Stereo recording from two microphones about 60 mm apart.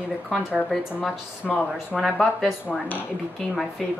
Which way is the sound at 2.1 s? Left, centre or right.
Centre.